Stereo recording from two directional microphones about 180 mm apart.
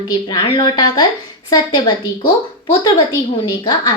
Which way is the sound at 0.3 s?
25° left (ahead or behind).